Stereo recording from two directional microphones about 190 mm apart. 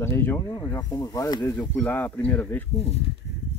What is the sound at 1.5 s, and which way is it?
Speech, 10° left (ahead or behind).